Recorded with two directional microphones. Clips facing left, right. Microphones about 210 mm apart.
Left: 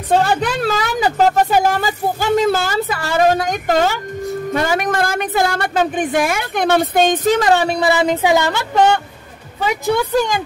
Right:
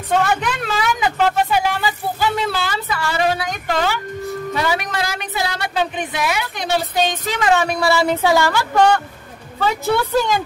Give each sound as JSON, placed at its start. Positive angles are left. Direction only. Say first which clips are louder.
{"t": 0.1, "sound": "a woman's voice", "louder": "left 3 dB", "side_deg": 35}
{"t": 7.8, "sound": "speech", "louder": "left 2 dB", "side_deg": 20}